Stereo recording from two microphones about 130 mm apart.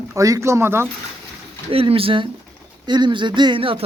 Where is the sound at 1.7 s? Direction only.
45° right (ahead or behind).